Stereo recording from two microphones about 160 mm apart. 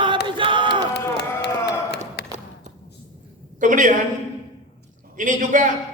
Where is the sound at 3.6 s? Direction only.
50° right (ahead or behind).